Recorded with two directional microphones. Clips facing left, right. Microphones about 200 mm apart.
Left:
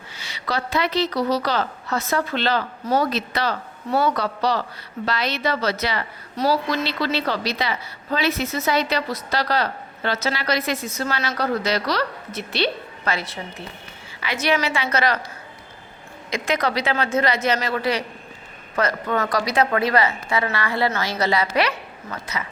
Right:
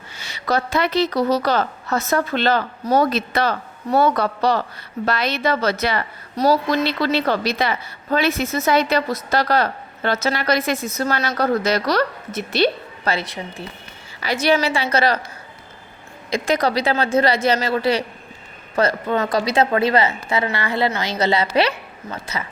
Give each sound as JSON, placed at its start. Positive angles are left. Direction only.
{"t": 0.1, "sound": "a woman's voice", "side_deg": -45}
{"t": 13.1, "sound": "a woman's voice", "side_deg": -35}
{"t": 14.4, "sound": "a woman's voice", "side_deg": -35}
{"t": 16.3, "sound": "a woman's voice", "side_deg": -35}